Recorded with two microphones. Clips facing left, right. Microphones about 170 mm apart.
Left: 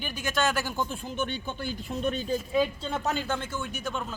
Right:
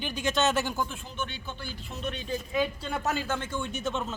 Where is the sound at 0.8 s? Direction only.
50° left (ahead or behind).